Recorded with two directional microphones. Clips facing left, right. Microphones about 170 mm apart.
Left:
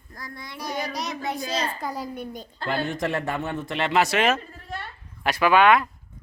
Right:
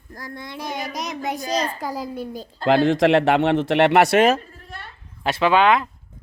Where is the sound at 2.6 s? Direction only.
90° right; by 4.2 s 65° right (ahead or behind).